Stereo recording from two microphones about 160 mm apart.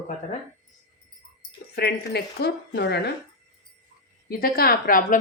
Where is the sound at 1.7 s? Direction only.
80° left.